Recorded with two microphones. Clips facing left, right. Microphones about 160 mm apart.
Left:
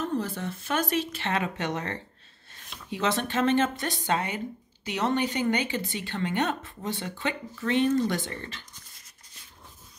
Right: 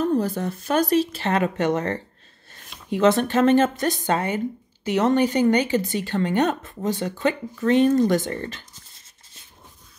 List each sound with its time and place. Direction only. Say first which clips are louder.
0.0 s speech: right 8 dB; 40° right (ahead or behind)